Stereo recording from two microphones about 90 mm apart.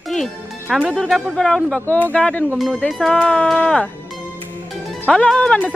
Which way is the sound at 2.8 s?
Centre (ahead or behind).